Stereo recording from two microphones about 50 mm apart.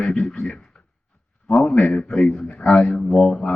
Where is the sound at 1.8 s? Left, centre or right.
Left.